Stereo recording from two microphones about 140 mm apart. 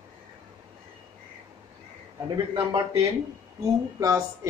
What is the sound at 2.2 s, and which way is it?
A man's voice, 30° right (ahead or behind).